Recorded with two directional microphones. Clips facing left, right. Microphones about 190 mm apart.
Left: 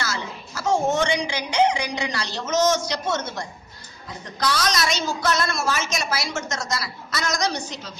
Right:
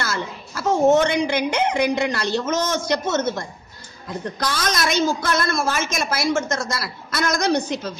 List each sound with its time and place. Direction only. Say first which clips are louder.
0.0 s a woman's voice: right 3 dB; 55° right (ahead or behind)